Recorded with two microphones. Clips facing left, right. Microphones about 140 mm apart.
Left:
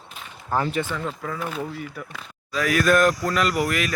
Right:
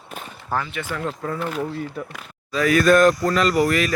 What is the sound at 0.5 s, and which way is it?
Speech, centre (ahead or behind).